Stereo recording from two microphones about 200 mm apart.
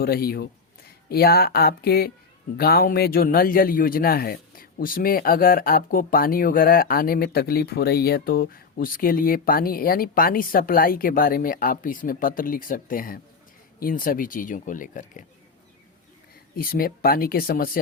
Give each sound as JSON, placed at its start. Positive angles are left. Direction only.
{"t": 0.0, "sound": "speech", "side_deg": 50}
{"t": 16.6, "sound": "speech", "side_deg": 50}